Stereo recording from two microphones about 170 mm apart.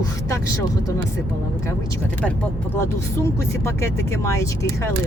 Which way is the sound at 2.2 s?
10° left (ahead or behind).